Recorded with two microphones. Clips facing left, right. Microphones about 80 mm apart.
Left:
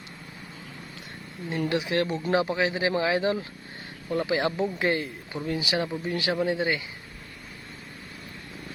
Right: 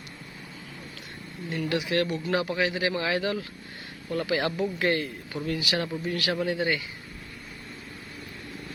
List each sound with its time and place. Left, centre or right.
1.5 s speech: left
1.7 s speech: left